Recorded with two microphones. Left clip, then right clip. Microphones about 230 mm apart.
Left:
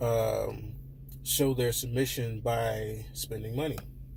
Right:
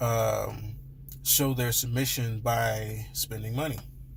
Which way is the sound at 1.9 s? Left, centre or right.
Right.